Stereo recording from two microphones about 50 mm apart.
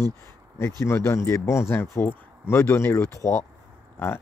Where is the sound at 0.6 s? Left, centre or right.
Left.